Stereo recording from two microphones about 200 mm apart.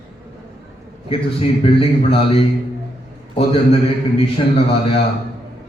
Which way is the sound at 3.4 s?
30° left (ahead or behind).